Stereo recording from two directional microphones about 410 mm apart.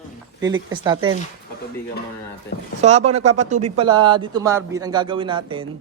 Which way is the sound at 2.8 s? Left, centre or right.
Centre.